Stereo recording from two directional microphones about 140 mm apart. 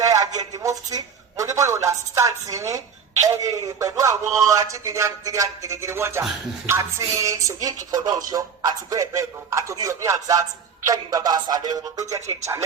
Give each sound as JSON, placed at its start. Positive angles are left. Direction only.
{"t": 0.1, "sound": "a man's voice", "side_deg": -25}